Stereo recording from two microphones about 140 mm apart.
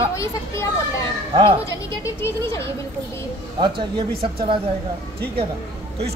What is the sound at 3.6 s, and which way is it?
Speech, 35° right (ahead or behind).